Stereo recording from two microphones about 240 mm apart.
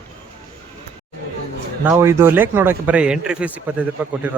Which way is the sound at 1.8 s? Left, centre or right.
Centre.